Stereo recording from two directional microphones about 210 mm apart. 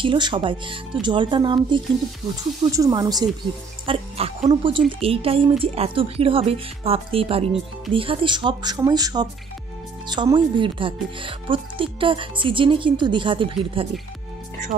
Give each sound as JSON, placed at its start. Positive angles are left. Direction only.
{"t": 0.0, "sound": "speech", "side_deg": -25}